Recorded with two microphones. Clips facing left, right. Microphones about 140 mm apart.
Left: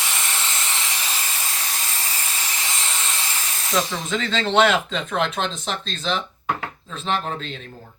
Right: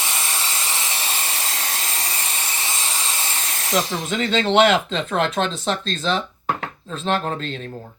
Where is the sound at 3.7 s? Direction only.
20° right (ahead or behind).